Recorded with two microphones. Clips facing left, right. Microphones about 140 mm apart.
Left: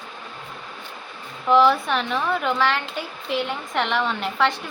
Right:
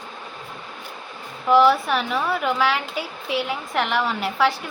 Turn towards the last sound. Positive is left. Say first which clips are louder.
# right 1 dB
turn(degrees=-5)  # may be behind; listen again after turning